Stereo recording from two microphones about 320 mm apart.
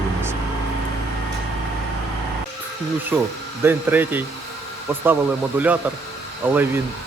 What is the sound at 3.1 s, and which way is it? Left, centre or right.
Speech, centre.